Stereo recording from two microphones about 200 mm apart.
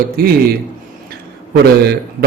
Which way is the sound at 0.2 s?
50° right (ahead or behind).